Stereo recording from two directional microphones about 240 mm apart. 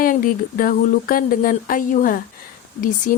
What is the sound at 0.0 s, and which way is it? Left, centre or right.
Speech, left.